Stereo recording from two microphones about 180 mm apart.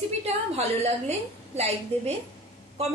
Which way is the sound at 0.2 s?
35° right (ahead or behind).